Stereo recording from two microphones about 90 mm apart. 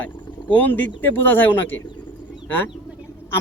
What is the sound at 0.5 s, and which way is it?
Speech, 20° left (ahead or behind).